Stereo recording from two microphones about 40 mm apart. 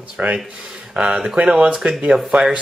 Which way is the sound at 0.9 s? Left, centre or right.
Right.